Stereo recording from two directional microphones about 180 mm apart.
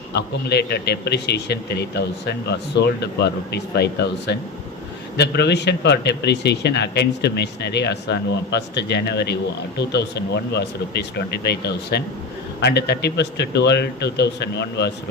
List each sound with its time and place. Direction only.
0.1 s a man's voice: 65° left (ahead or behind)